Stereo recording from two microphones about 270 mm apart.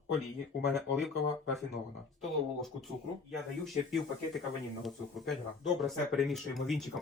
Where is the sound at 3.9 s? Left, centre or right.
Centre.